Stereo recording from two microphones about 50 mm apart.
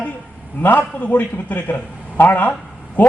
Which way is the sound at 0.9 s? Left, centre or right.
Left.